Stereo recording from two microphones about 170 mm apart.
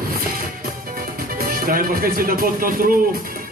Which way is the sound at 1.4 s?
55° right (ahead or behind).